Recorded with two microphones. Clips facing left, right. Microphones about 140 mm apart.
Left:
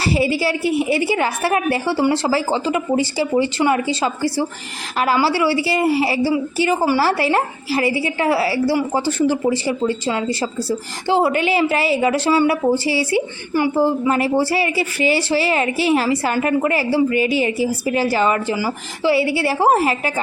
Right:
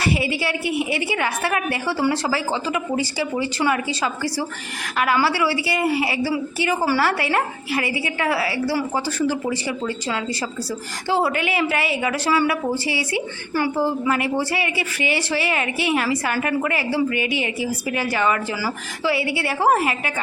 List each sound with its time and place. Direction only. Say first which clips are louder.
0.0 s speech: left 4 dB; 30° left (ahead or behind)